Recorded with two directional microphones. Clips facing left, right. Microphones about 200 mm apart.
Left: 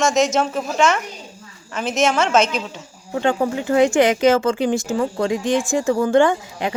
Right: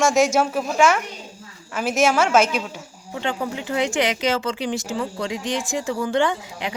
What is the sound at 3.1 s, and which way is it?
Speech, 50° left (ahead or behind).